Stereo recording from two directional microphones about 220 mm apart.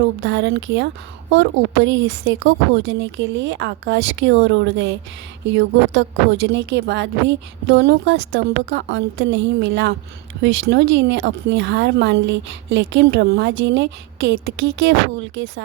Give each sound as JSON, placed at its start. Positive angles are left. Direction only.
{"t": 0.2, "sound": "a woman's voice", "side_deg": -55}